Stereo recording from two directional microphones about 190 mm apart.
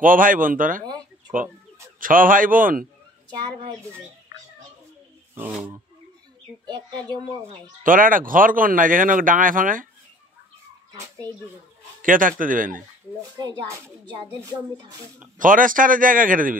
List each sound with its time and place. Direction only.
0.0 s speech: 45° right (ahead or behind)
0.8 s a sound: 20° right (ahead or behind)
2.0 s speech: 45° right (ahead or behind)
5.3 s speech: 10° right (ahead or behind)
7.8 s speech: 45° right (ahead or behind)
12.0 s speech: 45° right (ahead or behind)
13.4 s speech: 15° right (ahead or behind)
15.3 s speech: 45° right (ahead or behind)